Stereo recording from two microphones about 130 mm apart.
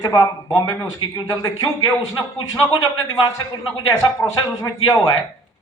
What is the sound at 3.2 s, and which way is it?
A man's voice, 30° left (ahead or behind).